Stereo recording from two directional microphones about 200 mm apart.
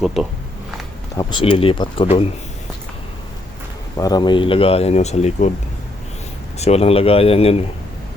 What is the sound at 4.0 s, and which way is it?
Speech, 20° left (ahead or behind).